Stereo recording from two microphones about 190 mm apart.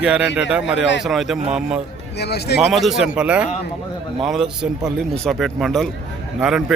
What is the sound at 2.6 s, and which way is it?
A man's voice, centre (ahead or behind).